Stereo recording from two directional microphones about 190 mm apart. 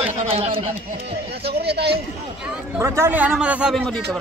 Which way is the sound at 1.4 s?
60° right (ahead or behind).